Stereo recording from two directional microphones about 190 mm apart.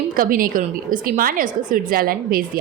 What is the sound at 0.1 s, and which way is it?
A woman's voice, 50° right (ahead or behind).